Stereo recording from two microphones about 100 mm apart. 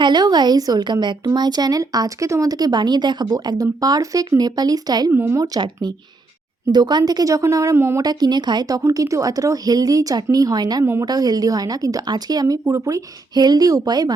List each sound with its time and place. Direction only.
0.0 s speech: 45° right (ahead or behind)
5.1 s speech: 20° right (ahead or behind)
5.4 s speech: 45° right (ahead or behind); by 8.0 s 25° right (ahead or behind)
8.0 s speech: 45° right (ahead or behind)
13.3 s speech: 45° right (ahead or behind)